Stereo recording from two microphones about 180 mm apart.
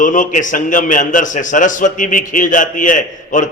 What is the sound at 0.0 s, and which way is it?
A man's voice, 45° left (ahead or behind).